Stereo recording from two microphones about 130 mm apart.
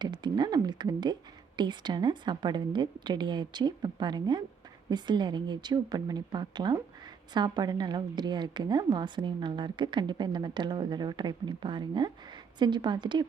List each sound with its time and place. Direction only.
0.0 s a woman's voice: 35° right (ahead or behind)